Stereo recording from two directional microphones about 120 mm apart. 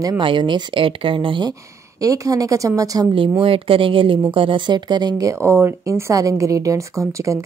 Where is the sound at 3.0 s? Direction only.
45° right (ahead or behind).